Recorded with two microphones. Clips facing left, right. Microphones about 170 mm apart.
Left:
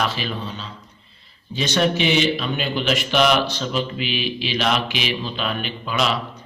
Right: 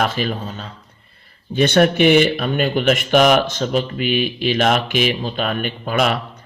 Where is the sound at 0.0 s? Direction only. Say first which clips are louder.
Right 4 dB; 50° right (ahead or behind).